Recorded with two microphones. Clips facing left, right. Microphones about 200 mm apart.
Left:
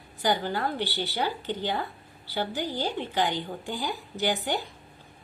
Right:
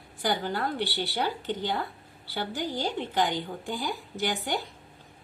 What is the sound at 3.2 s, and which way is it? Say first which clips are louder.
Speech: left 1 dB; 50° right (ahead or behind).